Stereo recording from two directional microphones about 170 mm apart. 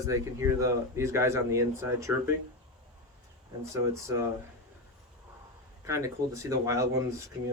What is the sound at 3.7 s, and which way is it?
Speech, 15° right (ahead or behind).